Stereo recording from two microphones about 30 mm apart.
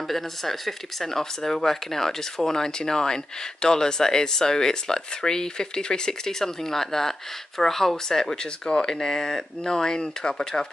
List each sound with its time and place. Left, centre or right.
0.1 s speech: centre; by 10.5 s left